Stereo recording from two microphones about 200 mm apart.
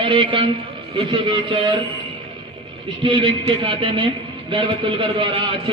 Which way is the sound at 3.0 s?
25° right (ahead or behind).